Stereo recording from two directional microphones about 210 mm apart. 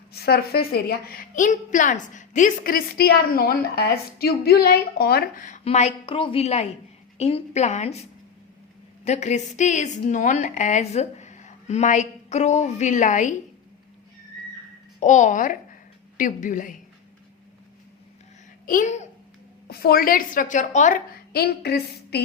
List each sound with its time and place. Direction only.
0.1 s a woman's voice: 50° left (ahead or behind); by 8.0 s 30° left (ahead or behind)
9.0 s a woman's voice: 35° left (ahead or behind)
15.0 s a woman's voice: 35° left (ahead or behind)
18.6 s speech: 40° left (ahead or behind)
19.6 s a woman's voice: 45° left (ahead or behind)